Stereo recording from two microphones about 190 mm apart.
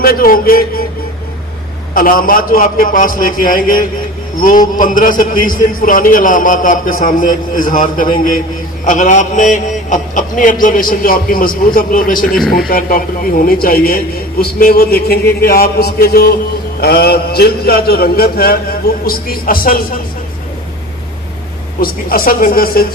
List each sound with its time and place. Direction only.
0.0 s a man's voice: 50° left (ahead or behind)
2.0 s a man's voice: 50° left (ahead or behind)
21.8 s a man's voice: 50° left (ahead or behind)